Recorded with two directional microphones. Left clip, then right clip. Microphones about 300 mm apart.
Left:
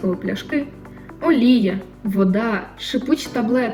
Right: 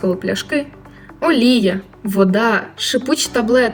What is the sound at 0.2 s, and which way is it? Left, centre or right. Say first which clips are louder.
Speech: right 4 dB; right.